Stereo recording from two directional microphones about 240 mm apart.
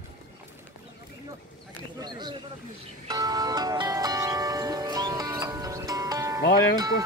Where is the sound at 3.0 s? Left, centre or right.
Centre.